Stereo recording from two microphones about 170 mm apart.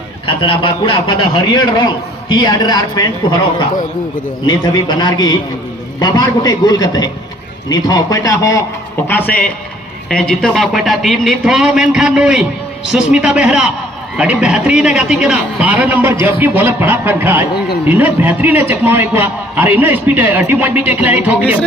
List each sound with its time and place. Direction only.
0.3 s a man's voice: 30° left (ahead or behind)
4.4 s a man's voice: 25° left (ahead or behind)
9.0 s a man's voice: 10° left (ahead or behind); by 21.6 s 10° right (ahead or behind)